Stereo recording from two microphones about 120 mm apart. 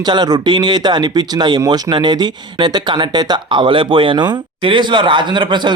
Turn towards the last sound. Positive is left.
turn(degrees=-40)  # may be behind; listen again after turning